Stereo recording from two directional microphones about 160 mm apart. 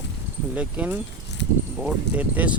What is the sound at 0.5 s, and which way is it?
Speech, 10° right (ahead or behind).